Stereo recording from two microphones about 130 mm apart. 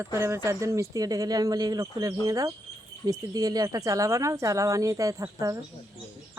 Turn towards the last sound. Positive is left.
turn(degrees=-25)  # may be behind; listen again after turning